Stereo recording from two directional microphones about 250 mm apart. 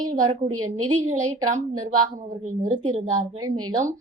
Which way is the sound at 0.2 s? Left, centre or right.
Centre.